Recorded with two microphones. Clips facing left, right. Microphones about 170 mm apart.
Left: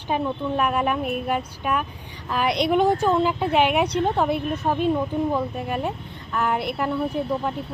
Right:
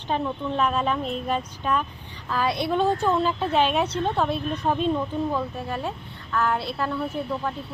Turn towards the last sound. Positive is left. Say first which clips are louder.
# left 3 dB
turn(degrees=15)  # may be behind; listen again after turning